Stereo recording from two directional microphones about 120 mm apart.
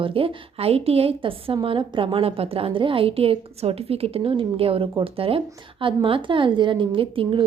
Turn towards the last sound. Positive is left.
turn(degrees=-45)  # may be behind; listen again after turning